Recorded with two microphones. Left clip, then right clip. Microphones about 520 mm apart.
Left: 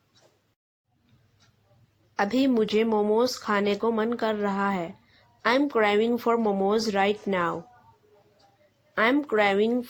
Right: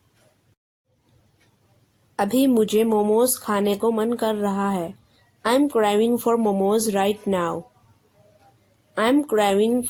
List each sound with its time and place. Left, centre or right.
2.1 s speech: right
9.0 s speech: right